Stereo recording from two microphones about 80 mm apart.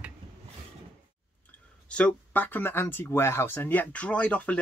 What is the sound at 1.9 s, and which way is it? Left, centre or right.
Speech, centre.